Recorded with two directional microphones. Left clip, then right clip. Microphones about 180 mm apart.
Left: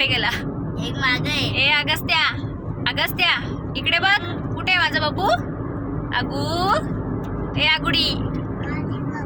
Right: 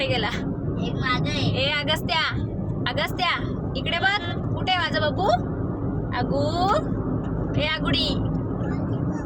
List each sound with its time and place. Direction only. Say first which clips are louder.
0.0 s speech: left 5 dB; 20° right (ahead or behind)
1.5 s speech: left 6 dB; 25° right (ahead or behind)
6.5 s speech: left 5 dB; 15° right (ahead or behind)